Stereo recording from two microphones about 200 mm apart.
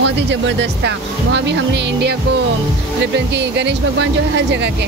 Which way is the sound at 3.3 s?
60° right (ahead or behind).